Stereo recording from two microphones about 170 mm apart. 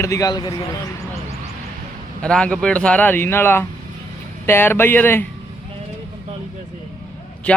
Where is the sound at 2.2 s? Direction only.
5° left (ahead or behind).